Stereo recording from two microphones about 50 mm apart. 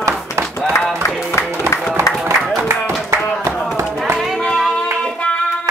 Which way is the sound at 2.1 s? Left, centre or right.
Left.